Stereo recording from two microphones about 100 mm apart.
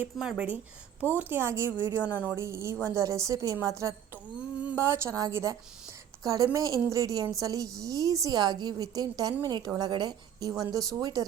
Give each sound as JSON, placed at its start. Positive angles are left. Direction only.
{"t": 0.2, "sound": "a woman's voice", "side_deg": -10}